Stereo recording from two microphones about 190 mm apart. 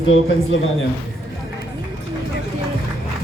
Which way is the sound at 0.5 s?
85° left.